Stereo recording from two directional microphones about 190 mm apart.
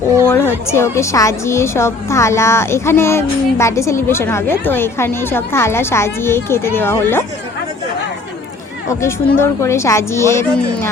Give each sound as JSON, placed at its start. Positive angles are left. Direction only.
{"t": 0.3, "sound": "a woman's voice", "side_deg": 10}
{"t": 9.0, "sound": "a woman's voice", "side_deg": 15}